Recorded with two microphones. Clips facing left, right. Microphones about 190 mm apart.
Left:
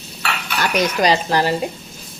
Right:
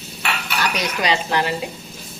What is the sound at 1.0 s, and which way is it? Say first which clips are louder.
Speech: left 2 dB; 40° left (ahead or behind).